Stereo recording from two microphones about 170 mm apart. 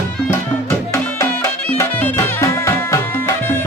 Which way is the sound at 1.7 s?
10° left (ahead or behind).